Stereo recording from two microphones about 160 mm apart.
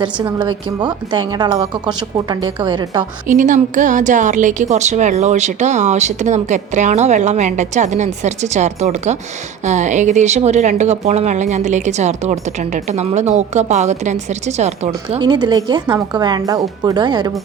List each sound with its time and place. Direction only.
0.0 s a woman's voice: 30° right (ahead or behind)
3.2 s a woman's voice: 55° right (ahead or behind)
15.2 s a woman's voice: 25° right (ahead or behind)